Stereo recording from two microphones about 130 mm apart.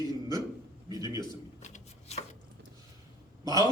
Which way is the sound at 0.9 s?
30° right (ahead or behind).